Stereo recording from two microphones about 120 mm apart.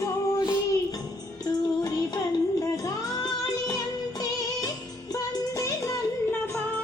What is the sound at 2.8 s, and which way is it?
Music, 30° left (ahead or behind).